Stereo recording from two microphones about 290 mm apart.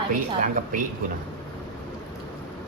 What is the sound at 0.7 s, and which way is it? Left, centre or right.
Speech, right.